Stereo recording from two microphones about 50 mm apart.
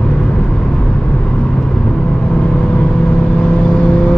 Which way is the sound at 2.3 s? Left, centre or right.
Left.